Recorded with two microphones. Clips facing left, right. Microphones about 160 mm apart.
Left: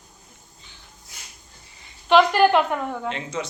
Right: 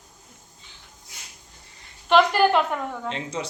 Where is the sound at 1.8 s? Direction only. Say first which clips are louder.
Left 2 dB; centre (ahead or behind).